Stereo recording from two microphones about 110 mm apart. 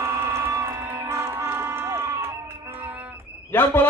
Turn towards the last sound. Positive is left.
turn(degrees=20)  # may be behind; listen again after turning